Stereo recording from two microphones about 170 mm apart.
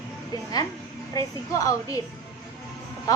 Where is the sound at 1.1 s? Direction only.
20° left (ahead or behind).